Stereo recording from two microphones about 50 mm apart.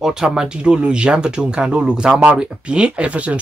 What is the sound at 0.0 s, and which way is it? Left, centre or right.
Speech, centre.